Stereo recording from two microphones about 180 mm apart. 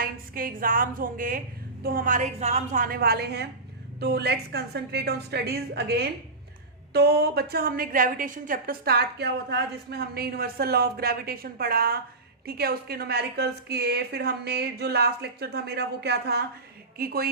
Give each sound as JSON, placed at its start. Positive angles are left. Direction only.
{"t": 0.0, "sound": "a woman's voice", "side_deg": -50}